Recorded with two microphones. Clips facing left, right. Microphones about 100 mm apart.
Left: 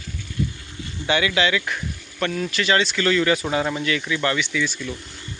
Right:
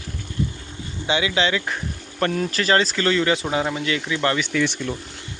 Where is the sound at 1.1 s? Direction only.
20° right (ahead or behind).